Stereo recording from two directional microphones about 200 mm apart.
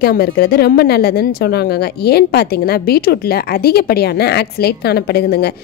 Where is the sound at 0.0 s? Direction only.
50° left (ahead or behind).